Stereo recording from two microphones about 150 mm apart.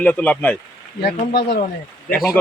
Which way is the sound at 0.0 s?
10° left (ahead or behind).